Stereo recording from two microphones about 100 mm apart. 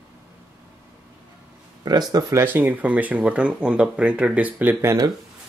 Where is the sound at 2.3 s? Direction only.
20° right (ahead or behind).